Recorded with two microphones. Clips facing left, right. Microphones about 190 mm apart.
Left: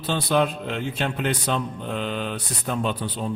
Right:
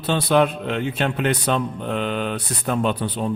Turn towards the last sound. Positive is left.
turn(degrees=-60)  # may be behind; listen again after turning